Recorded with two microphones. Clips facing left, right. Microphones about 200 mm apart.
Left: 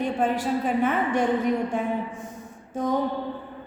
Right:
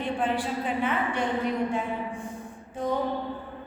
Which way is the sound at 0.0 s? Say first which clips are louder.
Left 3 dB; 45° left (ahead or behind).